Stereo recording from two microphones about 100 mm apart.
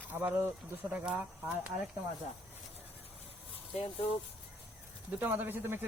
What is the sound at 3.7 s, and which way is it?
Speech, 75° left (ahead or behind).